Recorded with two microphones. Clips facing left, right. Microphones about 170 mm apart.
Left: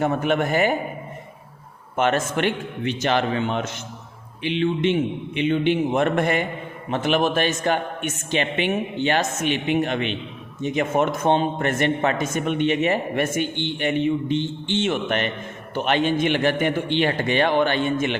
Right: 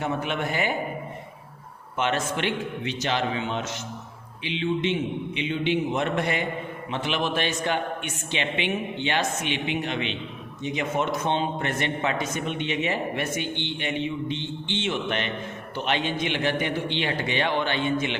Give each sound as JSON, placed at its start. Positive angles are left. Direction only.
{"t": 0.0, "sound": "a man's voice", "side_deg": 45}
{"t": 2.0, "sound": "a man's voice", "side_deg": 50}